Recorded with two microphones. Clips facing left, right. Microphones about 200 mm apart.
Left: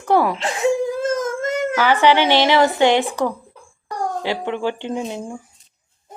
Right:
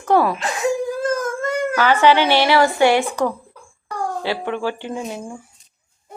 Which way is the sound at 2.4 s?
20° left (ahead or behind).